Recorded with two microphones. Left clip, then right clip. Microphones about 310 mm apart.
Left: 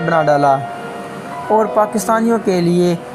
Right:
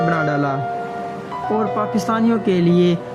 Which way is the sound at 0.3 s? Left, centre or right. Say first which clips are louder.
Left 8 dB; left.